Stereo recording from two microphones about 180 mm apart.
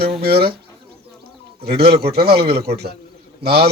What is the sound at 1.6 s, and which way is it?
Speech, 30° right (ahead or behind).